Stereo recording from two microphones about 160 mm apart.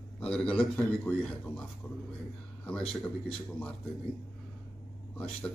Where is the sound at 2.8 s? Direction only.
35° left (ahead or behind).